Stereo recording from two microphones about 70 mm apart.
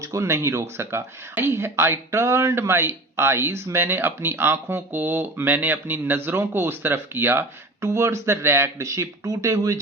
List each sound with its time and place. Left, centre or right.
0.0 s speech: right
8.8 s speech: right